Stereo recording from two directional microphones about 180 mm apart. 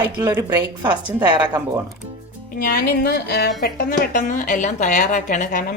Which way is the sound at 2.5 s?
55° left (ahead or behind).